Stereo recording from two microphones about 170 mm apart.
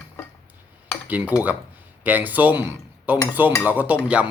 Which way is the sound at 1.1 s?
10° right (ahead or behind).